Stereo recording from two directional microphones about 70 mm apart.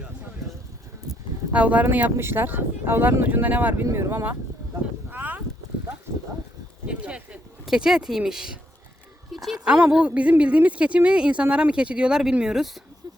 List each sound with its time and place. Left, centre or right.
1.5 s speech: right
2.1 s speech: right
3.9 s speech: right
5.1 s a sound: right
6.8 s speech: centre
7.6 s speech: centre
9.3 s a sound: centre
9.6 s speech: centre